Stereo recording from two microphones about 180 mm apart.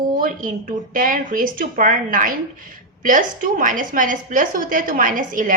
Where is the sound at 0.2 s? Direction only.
50° right (ahead or behind).